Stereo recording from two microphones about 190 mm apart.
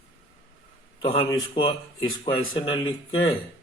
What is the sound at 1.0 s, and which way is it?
Speech, 30° left (ahead or behind).